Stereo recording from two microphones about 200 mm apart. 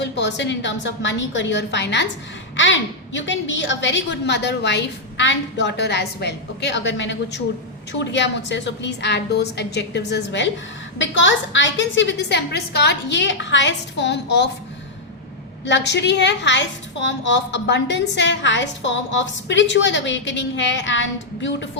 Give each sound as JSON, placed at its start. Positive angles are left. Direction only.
{"t": 0.0, "sound": "a woman's voice", "side_deg": 60}
{"t": 15.6, "sound": "a woman's voice", "side_deg": 60}